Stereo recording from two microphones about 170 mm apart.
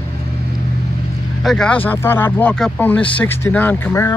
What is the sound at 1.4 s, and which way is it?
Speech, 5° left (ahead or behind).